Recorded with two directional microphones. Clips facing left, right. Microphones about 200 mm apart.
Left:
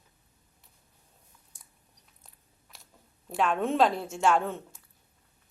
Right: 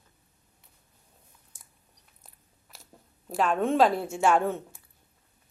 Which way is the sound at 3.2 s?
Centre (ahead or behind).